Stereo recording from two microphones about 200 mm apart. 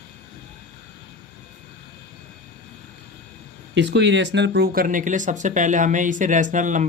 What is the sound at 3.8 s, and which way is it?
Speech, 65° right (ahead or behind).